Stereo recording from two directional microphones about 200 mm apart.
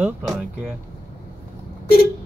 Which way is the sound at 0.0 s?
5° right (ahead or behind).